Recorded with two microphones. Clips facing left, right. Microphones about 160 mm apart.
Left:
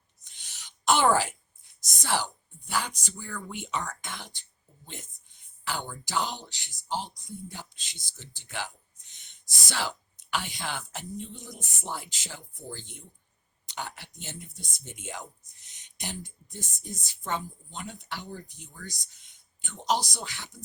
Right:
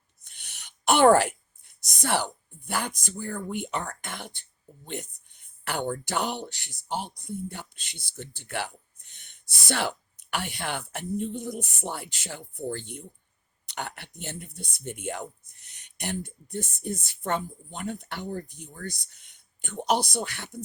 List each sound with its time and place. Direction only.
0.3 s a sound: 60° right (ahead or behind)
2.0 s speech: 60° right (ahead or behind)
5.6 s speech: 60° right (ahead or behind)